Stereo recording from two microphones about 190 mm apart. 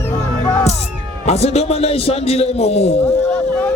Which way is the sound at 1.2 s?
35° left (ahead or behind).